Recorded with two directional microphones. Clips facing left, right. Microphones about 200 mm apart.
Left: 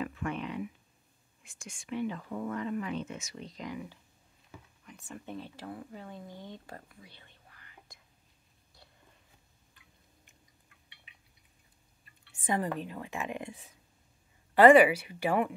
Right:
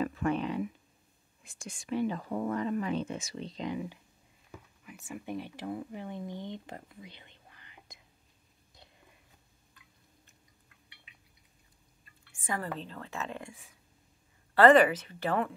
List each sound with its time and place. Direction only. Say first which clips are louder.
0.0 s a sound: right 5 dB; 35° right (ahead or behind)
1.4 s speech: right 4 dB; 35° right (ahead or behind)
4.8 s speech: right 4 dB; 5° right (ahead or behind)
12.0 s speech: left 1 dB; 20° left (ahead or behind)